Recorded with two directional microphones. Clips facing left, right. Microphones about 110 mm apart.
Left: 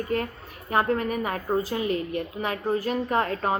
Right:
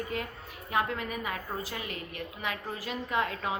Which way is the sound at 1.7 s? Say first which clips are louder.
Left 12 dB; 30° left (ahead or behind).